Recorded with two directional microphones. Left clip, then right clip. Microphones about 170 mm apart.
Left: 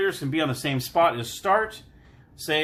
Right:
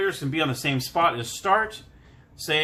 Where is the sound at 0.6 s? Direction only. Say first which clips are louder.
Left 2 dB; 25° left (ahead or behind).